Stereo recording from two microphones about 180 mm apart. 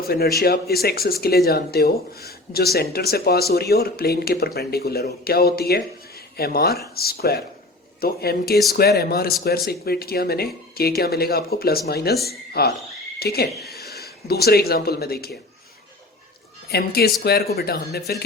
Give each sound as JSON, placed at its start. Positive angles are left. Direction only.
{"t": 0.1, "sound": "speech", "side_deg": 60}
{"t": 16.6, "sound": "speech", "side_deg": 60}